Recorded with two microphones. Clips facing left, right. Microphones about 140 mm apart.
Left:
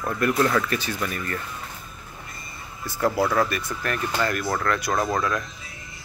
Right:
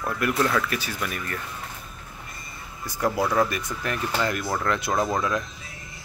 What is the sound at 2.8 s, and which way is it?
Speech, 15° right (ahead or behind).